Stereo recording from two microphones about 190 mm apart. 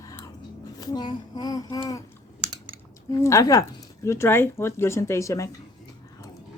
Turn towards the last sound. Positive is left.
turn(degrees=15)  # may be behind; listen again after turning